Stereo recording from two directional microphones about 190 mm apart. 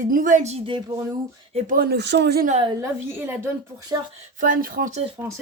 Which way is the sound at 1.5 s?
45° right (ahead or behind).